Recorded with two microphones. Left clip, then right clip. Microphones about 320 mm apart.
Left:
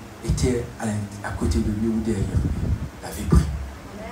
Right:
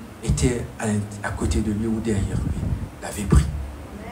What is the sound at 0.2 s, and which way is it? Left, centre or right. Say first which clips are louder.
A man's voice: even; right.